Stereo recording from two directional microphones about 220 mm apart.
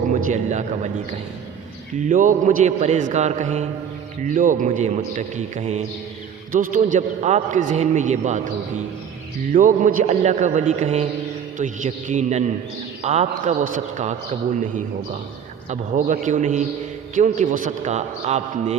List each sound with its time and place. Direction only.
0.1 s a man's voice: 35° right (ahead or behind)
2.0 s a man's voice: 35° right (ahead or behind)
9.5 s a man's voice: 35° right (ahead or behind)
15.7 s a man's voice: 35° right (ahead or behind)